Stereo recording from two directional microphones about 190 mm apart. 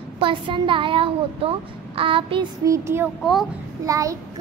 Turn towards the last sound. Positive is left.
turn(degrees=-15)  # may be behind; listen again after turning